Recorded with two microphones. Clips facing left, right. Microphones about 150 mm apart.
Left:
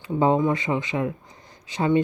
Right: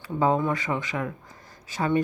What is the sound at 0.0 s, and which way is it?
Speech, 20° left (ahead or behind).